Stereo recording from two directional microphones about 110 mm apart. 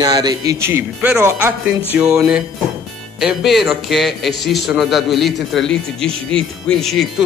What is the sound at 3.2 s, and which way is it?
Speech, centre (ahead or behind).